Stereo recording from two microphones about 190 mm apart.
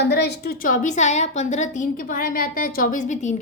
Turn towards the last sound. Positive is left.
turn(degrees=40)  # may be behind; listen again after turning